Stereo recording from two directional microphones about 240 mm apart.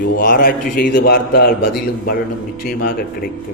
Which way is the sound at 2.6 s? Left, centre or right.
Left.